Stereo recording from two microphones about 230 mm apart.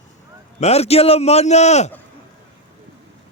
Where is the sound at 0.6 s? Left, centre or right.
Left.